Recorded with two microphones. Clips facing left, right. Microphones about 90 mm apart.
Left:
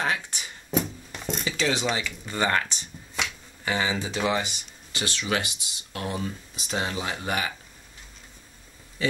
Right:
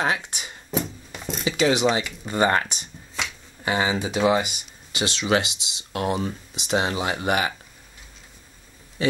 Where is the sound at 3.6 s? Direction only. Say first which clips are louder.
Right 4 dB; 20° right (ahead or behind).